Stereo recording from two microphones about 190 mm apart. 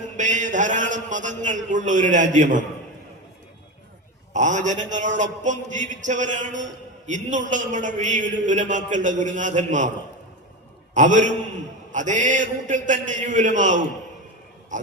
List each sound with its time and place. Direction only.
0.2 s a man's voice: 40° right (ahead or behind)
4.4 s a man's voice: 40° right (ahead or behind)
10.9 s a man's voice: 40° right (ahead or behind)